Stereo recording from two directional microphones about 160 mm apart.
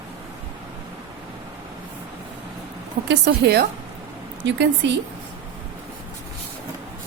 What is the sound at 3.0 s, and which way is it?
A woman's voice, 90° right.